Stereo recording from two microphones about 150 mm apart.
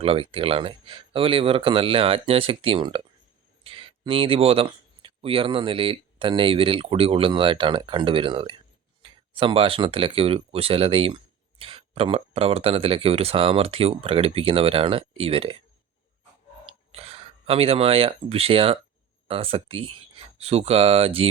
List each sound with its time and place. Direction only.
0.0 s speech: 40° right (ahead or behind)
16.9 s speech: 40° right (ahead or behind)